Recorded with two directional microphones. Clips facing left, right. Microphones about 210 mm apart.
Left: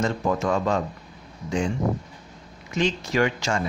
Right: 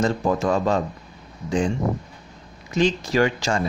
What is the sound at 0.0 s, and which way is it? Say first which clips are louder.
Speech: right 3 dB; 35° right (ahead or behind).